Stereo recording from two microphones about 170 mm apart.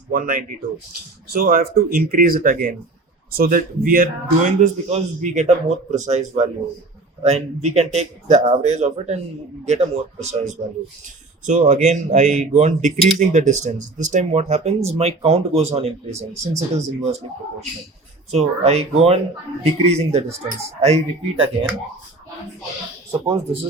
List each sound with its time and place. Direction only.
0.1 s speech: 50° right (ahead or behind)
18.3 s speech: 40° right (ahead or behind)